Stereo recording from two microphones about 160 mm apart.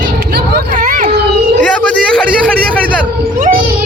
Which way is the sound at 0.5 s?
55° right (ahead or behind).